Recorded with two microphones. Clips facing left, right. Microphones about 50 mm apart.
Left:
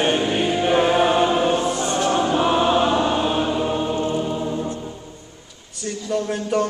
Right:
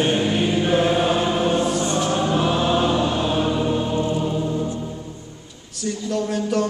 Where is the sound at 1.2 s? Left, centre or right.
Centre.